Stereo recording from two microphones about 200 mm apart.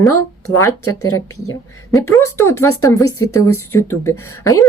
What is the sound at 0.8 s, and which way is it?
Speech, 90° left.